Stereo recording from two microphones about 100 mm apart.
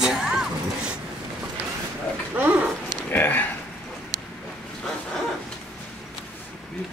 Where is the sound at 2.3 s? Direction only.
15° right (ahead or behind).